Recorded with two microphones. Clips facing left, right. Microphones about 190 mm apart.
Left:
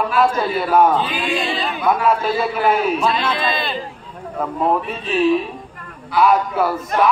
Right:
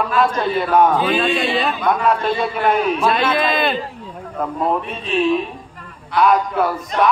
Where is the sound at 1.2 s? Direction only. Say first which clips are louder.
Right 3 dB; 60° right (ahead or behind).